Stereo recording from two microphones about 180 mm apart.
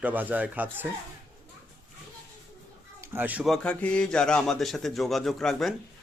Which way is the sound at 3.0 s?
10° right (ahead or behind).